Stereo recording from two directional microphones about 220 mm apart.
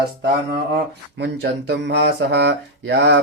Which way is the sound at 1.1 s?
50° right (ahead or behind).